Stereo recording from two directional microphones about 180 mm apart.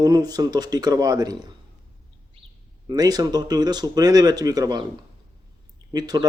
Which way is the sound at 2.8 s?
20° right (ahead or behind).